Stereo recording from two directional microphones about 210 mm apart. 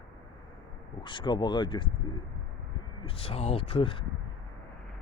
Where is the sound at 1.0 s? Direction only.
25° left (ahead or behind).